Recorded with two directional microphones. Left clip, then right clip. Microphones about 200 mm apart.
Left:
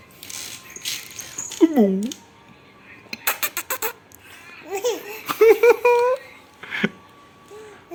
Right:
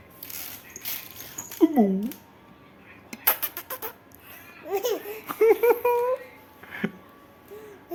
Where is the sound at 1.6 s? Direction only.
5° left (ahead or behind).